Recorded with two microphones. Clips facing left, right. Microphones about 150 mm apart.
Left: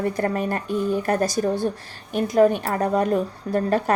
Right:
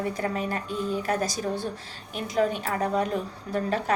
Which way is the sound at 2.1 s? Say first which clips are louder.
Left 8 dB; 45° left (ahead or behind).